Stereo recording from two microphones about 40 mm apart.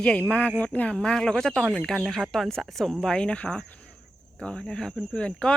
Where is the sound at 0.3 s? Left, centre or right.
Left.